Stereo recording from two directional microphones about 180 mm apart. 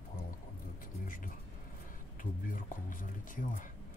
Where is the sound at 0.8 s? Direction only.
50° left (ahead or behind).